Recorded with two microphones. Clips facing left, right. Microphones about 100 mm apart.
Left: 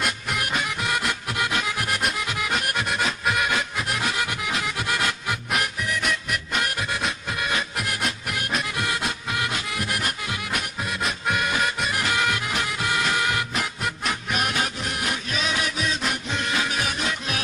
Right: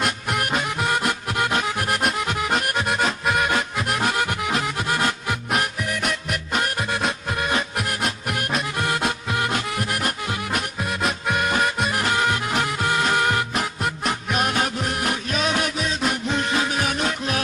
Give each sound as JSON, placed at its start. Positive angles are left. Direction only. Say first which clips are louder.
{"t": 0.0, "sound": "music", "louder": "right 3 dB", "side_deg": -50}
{"t": 2.2, "sound": "accordion", "louder": "right 4 dB", "side_deg": -45}
{"t": 3.3, "sound": "music", "louder": "right 3 dB", "side_deg": -40}